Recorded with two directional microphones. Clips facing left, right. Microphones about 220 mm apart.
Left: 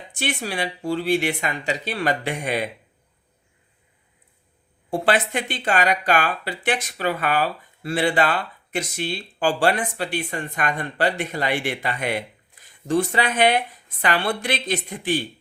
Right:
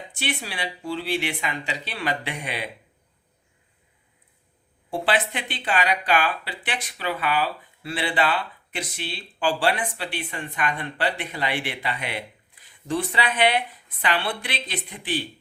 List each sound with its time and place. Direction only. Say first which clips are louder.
0.1 s speech: left 5 dB; 45° left (ahead or behind)
4.9 s speech: left 3 dB; 45° left (ahead or behind)